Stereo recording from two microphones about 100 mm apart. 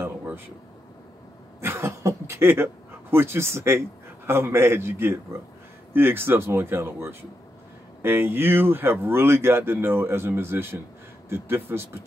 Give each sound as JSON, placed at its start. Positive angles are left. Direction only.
{"t": 1.6, "sound": "speech", "side_deg": -25}